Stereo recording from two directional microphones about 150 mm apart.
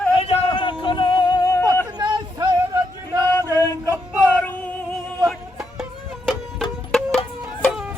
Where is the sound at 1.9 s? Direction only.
25° right (ahead or behind).